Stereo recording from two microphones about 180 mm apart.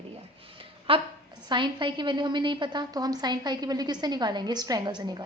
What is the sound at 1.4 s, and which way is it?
A woman's voice, 25° right (ahead or behind).